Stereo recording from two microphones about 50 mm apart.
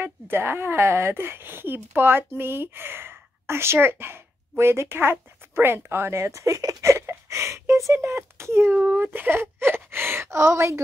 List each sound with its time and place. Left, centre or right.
0.0 s speech: right
8.6 s speech: right